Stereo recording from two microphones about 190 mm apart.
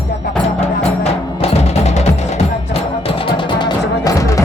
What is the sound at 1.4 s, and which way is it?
Music, 35° left (ahead or behind).